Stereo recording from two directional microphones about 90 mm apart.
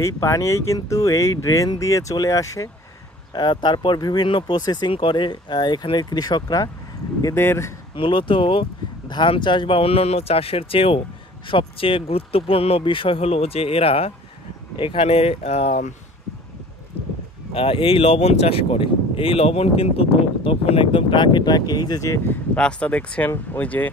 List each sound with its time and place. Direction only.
0.0 s speech: 35° left (ahead or behind)
3.3 s speech: 55° left (ahead or behind)
4.9 s speech: 65° left (ahead or behind); by 6.7 s 45° left (ahead or behind)
7.3 s speech: 30° left (ahead or behind)
7.9 s speech: 70° left (ahead or behind)
9.1 s speech: 60° left (ahead or behind); by 11.0 s 90° left
11.4 s speech: 75° left (ahead or behind)
17.6 s speech: 90° left; by 22.2 s 40° left (ahead or behind)
22.6 s speech: 15° left (ahead or behind)